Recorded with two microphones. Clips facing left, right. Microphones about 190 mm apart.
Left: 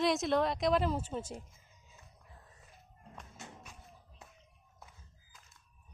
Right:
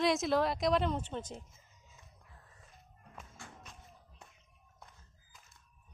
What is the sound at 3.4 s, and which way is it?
Music, 20° left (ahead or behind).